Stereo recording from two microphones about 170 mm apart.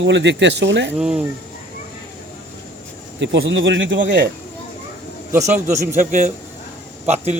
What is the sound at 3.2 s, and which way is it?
Speech, 90° right.